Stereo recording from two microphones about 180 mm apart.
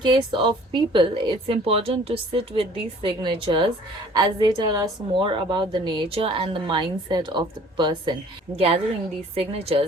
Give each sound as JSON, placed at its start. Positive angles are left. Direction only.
{"t": 0.0, "sound": "a woman's voice", "side_deg": -25}